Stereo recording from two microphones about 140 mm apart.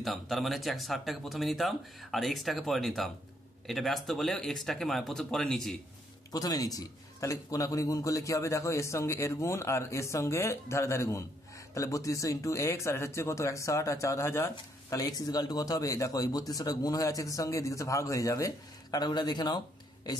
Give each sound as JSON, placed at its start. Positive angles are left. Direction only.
{"t": 0.0, "sound": "speech", "side_deg": 0}
{"t": 6.3, "sound": "a man's voice", "side_deg": 25}